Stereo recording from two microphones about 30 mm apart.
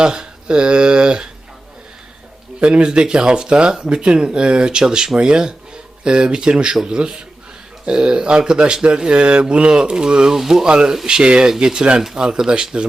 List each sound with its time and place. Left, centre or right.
0.0 s speech: right
2.6 s speech: right